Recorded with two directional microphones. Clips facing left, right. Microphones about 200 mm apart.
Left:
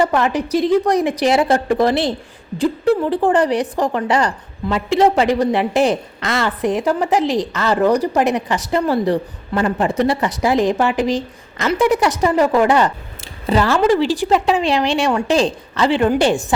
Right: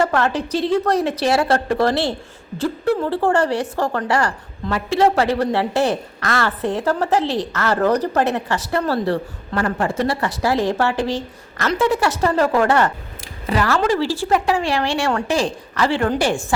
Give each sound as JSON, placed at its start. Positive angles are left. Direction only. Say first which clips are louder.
{"t": 0.0, "sound": "speech", "louder": "left 2 dB", "side_deg": 15}
{"t": 13.5, "sound": "a woman's voice", "louder": "left 4 dB", "side_deg": 25}